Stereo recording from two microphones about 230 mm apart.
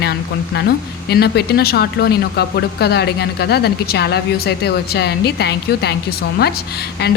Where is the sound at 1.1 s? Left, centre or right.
Left.